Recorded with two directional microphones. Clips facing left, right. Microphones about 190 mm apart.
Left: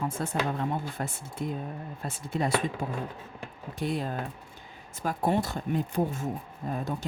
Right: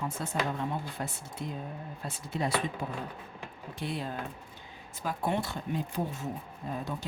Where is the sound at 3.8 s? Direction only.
45° left (ahead or behind).